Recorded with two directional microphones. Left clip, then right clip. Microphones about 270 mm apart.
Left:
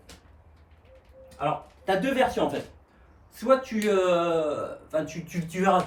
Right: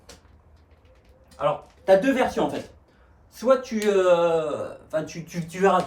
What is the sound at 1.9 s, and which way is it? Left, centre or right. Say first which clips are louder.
Speech: right 5 dB; centre.